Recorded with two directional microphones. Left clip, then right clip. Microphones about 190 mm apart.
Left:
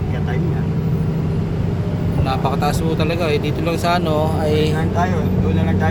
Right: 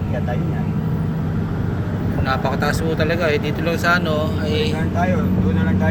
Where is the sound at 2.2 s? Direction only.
25° left (ahead or behind); by 4.7 s 40° left (ahead or behind).